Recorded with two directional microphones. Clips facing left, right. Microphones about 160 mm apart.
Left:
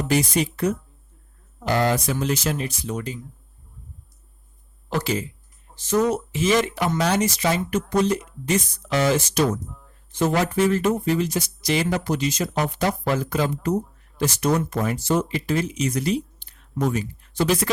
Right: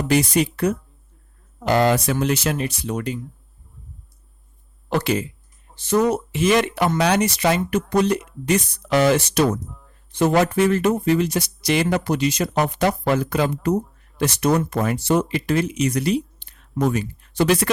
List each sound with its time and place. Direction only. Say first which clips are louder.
0.1 s speech: right 3 dB; 65° right (ahead or behind)
4.9 s speech: right 3 dB; 65° right (ahead or behind)